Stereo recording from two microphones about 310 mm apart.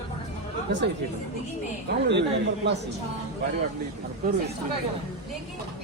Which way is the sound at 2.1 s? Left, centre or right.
Right.